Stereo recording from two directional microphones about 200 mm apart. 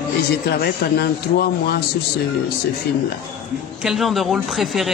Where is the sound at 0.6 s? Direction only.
50° left (ahead or behind).